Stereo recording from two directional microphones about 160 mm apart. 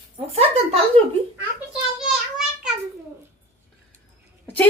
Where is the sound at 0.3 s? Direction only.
40° right (ahead or behind).